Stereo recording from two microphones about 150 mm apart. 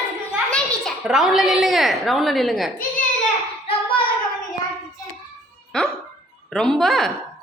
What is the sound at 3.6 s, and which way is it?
Child singing, 35° left (ahead or behind).